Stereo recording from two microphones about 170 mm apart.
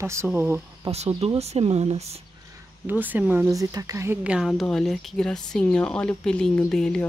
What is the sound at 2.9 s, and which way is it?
Speech, 10° right (ahead or behind).